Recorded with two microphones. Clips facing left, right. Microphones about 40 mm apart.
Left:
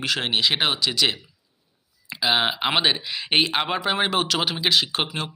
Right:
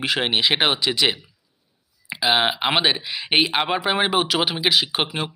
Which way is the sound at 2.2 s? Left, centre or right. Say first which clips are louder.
Right 2 dB; centre.